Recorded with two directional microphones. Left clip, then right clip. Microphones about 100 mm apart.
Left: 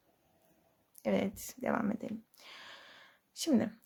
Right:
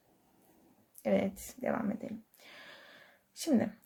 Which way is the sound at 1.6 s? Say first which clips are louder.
Left 1 dB; 50° left (ahead or behind).